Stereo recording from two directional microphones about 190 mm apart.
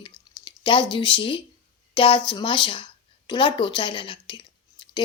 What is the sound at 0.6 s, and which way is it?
A woman's voice, 25° left (ahead or behind).